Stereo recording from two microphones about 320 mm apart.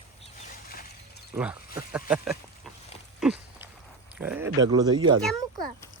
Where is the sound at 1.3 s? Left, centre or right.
Centre.